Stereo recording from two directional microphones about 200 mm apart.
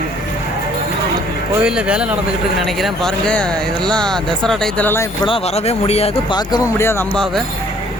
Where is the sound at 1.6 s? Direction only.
5° right (ahead or behind).